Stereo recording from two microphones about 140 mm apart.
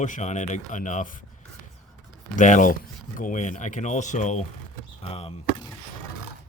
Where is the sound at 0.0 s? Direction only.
60° left (ahead or behind).